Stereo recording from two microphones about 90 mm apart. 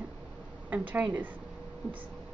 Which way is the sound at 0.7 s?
20° right (ahead or behind).